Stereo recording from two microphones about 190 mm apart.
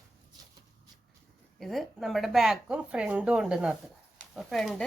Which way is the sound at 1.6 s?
Centre (ahead or behind).